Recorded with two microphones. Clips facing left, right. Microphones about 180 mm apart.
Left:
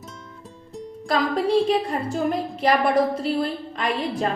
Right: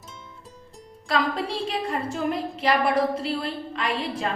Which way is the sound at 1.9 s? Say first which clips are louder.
Left 3 dB; 40° left (ahead or behind).